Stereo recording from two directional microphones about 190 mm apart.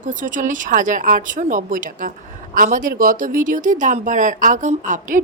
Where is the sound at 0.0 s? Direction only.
40° right (ahead or behind).